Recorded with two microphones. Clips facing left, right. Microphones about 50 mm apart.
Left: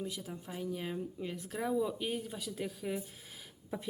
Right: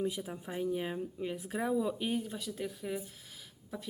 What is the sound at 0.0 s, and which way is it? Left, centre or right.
Speech, centre.